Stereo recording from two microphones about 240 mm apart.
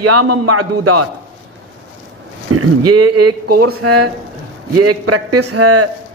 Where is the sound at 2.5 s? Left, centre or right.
Right.